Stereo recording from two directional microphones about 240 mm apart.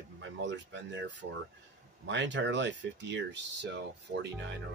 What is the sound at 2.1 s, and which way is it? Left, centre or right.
Speech, right.